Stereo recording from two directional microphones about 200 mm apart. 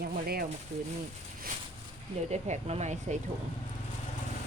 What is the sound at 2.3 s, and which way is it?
Speech, 35° right (ahead or behind).